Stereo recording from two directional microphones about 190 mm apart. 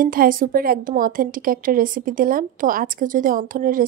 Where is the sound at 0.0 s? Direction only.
50° right (ahead or behind).